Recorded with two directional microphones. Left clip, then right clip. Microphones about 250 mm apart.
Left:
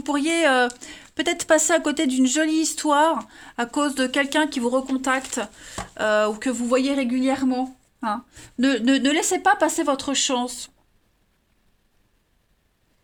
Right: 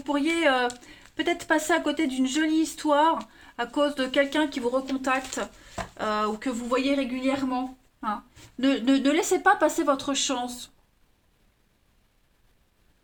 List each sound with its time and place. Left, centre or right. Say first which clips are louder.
0.0 s speech: left 3 dB; left
8.6 s speech: left 3 dB; left